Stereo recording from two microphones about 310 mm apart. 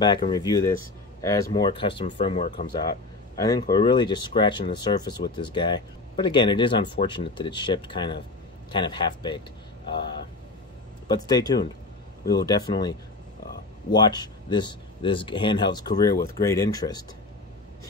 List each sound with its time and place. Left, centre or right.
0.3 s speech: centre
11.1 s speech: centre
13.9 s speech: centre